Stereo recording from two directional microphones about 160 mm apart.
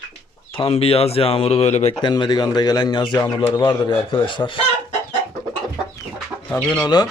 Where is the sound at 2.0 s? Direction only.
25° left (ahead or behind).